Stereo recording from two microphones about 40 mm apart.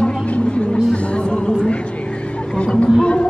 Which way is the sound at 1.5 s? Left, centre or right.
Left.